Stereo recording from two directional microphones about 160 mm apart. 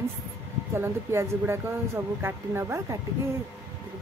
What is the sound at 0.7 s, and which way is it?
Speech, 15° right (ahead or behind).